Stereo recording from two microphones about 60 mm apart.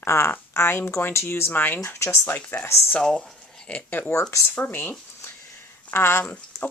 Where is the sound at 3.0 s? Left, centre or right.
Centre.